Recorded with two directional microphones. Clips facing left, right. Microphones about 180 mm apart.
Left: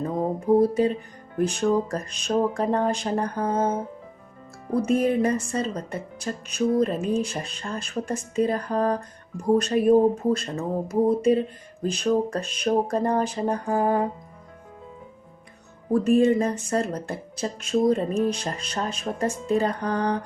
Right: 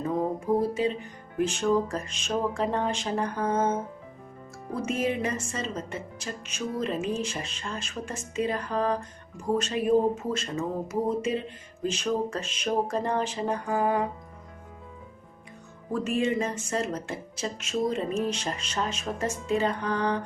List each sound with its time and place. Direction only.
0.3 s speech: 35° left (ahead or behind)
15.9 s speech: 35° left (ahead or behind)